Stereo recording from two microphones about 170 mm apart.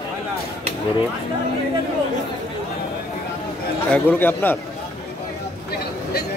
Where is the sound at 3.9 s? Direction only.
10° left (ahead or behind).